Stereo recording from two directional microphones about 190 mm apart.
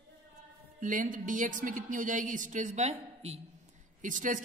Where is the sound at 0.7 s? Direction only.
40° right (ahead or behind).